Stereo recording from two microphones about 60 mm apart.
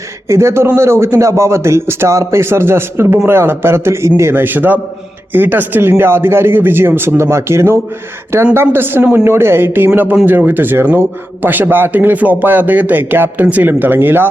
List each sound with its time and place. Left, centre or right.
0.3 s speech: right